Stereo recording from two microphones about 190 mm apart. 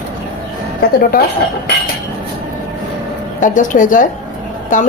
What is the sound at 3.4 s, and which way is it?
A woman's voice, 40° left (ahead or behind).